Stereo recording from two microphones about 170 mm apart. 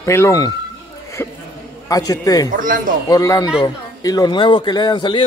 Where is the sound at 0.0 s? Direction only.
15° left (ahead or behind).